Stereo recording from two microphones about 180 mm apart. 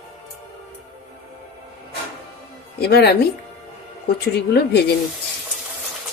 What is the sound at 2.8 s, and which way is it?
Speech, 65° left (ahead or behind).